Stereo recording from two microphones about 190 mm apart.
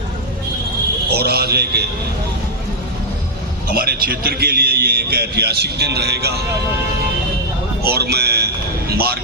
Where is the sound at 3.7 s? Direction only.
55° right (ahead or behind).